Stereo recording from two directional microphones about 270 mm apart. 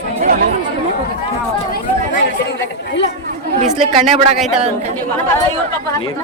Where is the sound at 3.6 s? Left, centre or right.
Right.